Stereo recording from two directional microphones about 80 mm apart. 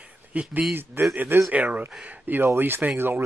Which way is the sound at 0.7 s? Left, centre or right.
Right.